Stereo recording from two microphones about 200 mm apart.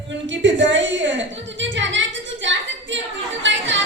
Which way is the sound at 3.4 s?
65° right (ahead or behind).